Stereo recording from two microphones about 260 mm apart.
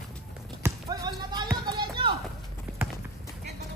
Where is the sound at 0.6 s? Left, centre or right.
Centre.